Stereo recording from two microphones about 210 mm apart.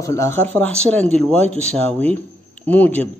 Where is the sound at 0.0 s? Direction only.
15° left (ahead or behind).